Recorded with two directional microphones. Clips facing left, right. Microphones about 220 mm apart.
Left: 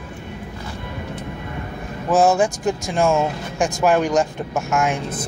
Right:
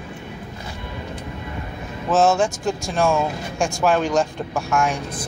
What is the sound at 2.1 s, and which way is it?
Speech, 15° left (ahead or behind).